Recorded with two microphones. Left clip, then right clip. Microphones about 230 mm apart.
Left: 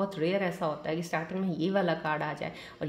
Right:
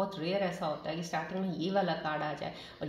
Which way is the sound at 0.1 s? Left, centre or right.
Left.